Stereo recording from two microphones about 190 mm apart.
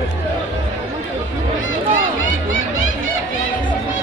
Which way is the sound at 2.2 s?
90° left.